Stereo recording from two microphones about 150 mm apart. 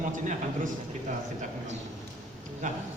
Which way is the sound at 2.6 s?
60° right (ahead or behind).